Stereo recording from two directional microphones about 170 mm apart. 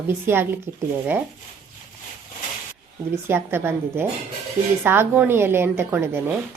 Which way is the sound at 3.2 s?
15° right (ahead or behind).